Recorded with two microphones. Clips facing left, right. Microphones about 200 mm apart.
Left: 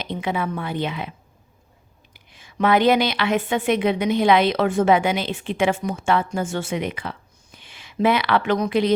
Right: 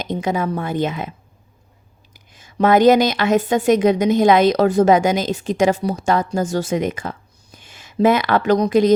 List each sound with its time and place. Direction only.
0.0 s a woman's voice: 45° right (ahead or behind)
2.1 s a woman's voice: 40° right (ahead or behind)